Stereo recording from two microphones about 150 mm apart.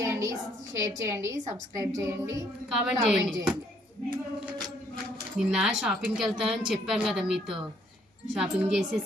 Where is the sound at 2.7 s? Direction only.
5° right (ahead or behind).